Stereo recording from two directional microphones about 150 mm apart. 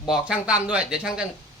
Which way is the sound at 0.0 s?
5° right (ahead or behind).